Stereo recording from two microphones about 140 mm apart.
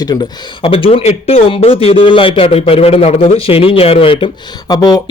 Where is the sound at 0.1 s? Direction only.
25° left (ahead or behind).